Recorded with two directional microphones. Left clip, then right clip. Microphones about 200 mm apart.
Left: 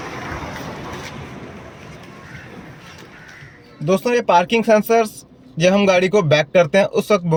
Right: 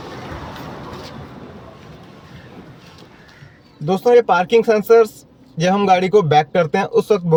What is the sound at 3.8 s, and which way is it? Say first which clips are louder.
A man's voice: right 4 dB; 15° left (ahead or behind).